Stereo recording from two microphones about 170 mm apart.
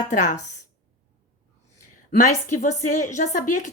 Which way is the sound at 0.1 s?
50° left (ahead or behind).